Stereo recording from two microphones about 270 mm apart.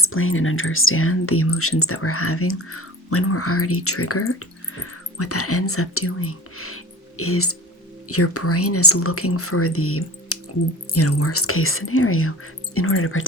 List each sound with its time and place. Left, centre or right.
0.0 s speech: left